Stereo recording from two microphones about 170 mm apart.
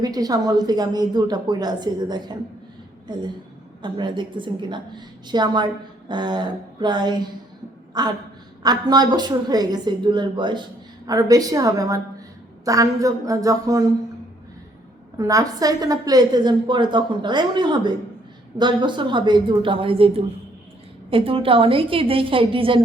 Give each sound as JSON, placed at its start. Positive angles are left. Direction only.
{"t": 0.0, "sound": "a woman's voice", "side_deg": -20}
{"t": 3.8, "sound": "a woman's voice", "side_deg": -25}
{"t": 15.2, "sound": "a woman's voice", "side_deg": -20}